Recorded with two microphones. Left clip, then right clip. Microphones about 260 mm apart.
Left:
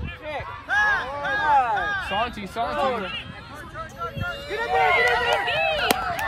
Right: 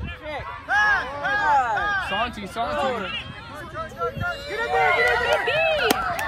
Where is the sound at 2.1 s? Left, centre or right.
Left.